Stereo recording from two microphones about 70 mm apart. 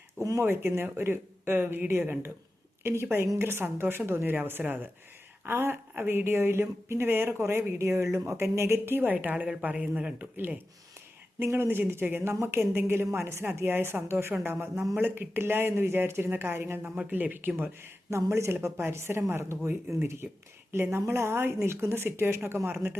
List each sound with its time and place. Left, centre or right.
0.2 s speech: right
0.4 s speech: right; by 10.2 s centre
10.2 s speech: right
16.8 s speech: right
20.2 s speech: right
20.7 s speech: right